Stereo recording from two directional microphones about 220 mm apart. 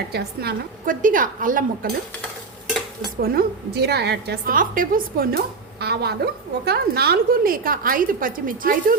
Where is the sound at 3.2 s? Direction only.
45° right (ahead or behind).